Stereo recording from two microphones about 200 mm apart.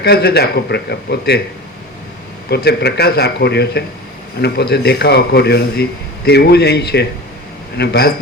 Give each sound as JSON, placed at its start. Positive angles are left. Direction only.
{"t": 0.0, "sound": "speech", "side_deg": 50}
{"t": 2.5, "sound": "speech", "side_deg": 55}